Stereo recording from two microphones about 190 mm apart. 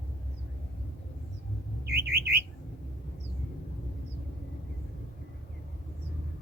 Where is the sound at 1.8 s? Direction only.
55° right (ahead or behind).